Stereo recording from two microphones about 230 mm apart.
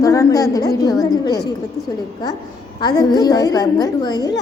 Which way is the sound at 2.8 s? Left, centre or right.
Centre.